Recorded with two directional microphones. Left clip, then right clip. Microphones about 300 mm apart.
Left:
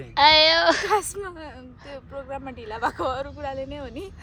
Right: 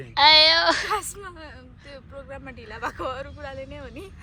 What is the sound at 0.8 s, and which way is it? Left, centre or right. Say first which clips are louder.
Speech: left 4 dB; left.